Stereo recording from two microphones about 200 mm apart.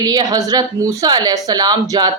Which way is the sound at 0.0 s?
20° right (ahead or behind).